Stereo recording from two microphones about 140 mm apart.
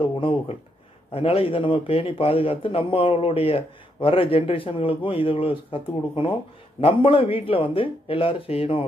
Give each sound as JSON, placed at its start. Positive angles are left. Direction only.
{"t": 0.0, "sound": "a man's voice", "side_deg": 40}